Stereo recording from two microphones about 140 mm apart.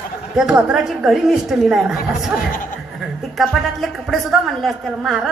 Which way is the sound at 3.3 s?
Centre (ahead or behind).